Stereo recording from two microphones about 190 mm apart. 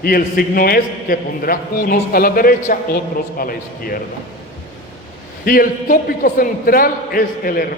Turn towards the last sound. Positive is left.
turn(degrees=50)  # may be behind; listen again after turning